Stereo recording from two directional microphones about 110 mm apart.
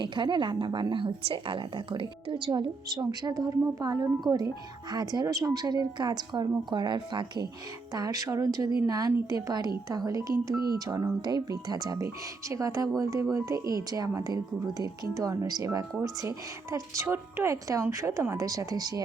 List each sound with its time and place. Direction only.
0.0 s a woman's voice: 45° right (ahead or behind)
7.9 s a woman's voice: 35° right (ahead or behind)